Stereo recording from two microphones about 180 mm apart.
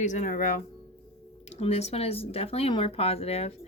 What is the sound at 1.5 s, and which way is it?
Speech, 35° left (ahead or behind).